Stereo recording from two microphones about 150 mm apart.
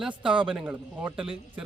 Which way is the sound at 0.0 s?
5° right (ahead or behind).